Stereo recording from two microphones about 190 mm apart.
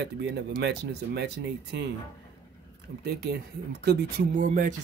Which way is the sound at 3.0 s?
60° right (ahead or behind).